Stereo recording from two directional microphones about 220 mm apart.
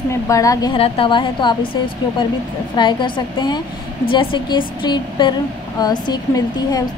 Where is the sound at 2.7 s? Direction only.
20° left (ahead or behind).